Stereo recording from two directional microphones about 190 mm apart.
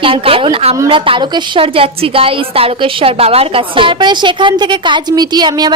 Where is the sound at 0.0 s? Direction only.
30° right (ahead or behind).